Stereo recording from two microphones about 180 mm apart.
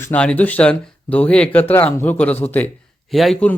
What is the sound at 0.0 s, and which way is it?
Speech, 5° left (ahead or behind).